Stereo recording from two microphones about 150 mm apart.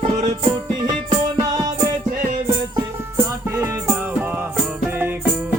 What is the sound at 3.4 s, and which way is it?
Music, 15° right (ahead or behind).